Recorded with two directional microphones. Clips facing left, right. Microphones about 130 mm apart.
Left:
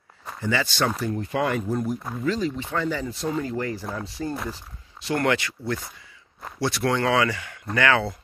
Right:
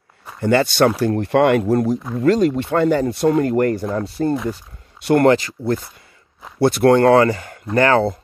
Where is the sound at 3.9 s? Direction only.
55° right (ahead or behind).